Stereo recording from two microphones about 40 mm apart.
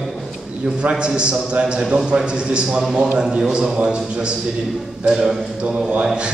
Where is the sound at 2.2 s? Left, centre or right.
Right.